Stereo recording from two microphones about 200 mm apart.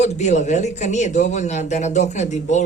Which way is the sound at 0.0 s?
35° left (ahead or behind).